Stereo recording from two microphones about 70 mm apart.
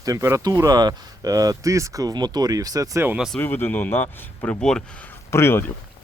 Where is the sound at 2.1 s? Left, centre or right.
Right.